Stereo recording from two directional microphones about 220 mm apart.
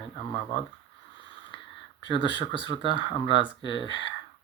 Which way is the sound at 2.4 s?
25° left (ahead or behind).